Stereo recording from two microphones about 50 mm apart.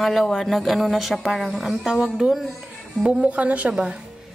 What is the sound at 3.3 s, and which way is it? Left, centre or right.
Speech, right.